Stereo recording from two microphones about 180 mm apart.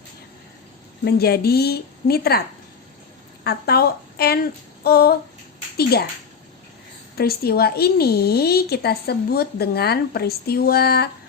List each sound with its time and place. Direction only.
1.0 s speech: 60° left (ahead or behind)
3.4 s a woman's voice: 60° left (ahead or behind)
4.8 s a sound: 60° left (ahead or behind)
5.7 s a child's voice: 60° left (ahead or behind)
7.2 s speech: 60° left (ahead or behind)